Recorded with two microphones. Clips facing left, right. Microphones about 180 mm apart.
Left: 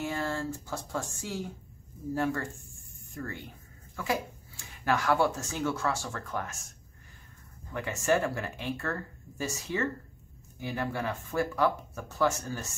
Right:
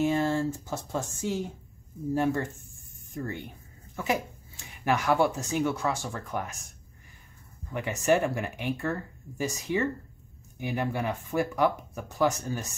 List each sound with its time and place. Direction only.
0.0 s speech: 20° right (ahead or behind)
7.7 s speech: 15° right (ahead or behind)